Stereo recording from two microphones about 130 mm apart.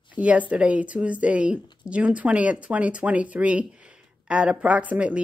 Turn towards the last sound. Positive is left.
turn(degrees=-10)  # may be behind; listen again after turning